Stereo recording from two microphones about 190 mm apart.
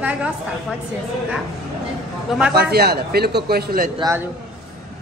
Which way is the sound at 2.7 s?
55° right (ahead or behind).